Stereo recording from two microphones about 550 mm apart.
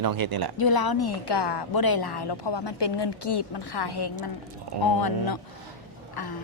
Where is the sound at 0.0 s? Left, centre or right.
Right.